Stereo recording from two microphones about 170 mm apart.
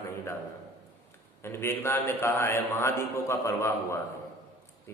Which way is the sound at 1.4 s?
15° left (ahead or behind).